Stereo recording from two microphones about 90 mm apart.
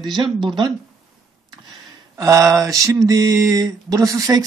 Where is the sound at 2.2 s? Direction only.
35° right (ahead or behind).